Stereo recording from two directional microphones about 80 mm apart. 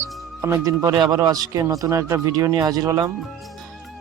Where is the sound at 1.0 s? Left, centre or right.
Right.